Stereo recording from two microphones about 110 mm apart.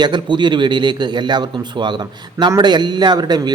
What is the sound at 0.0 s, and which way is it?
A man's voice, 45° right (ahead or behind).